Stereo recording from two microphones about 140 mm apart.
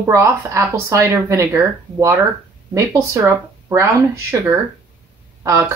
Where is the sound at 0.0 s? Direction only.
20° right (ahead or behind).